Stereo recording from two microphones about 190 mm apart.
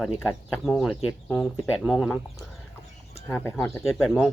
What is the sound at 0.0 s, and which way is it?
Speech, 5° right (ahead or behind).